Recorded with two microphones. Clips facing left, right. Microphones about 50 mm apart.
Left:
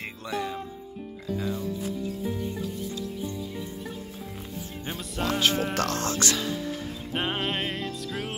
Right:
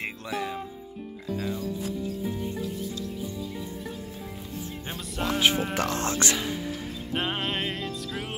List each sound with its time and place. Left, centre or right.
0.0 s music: centre
4.8 s music: centre
5.9 s speech: right
7.1 s music: centre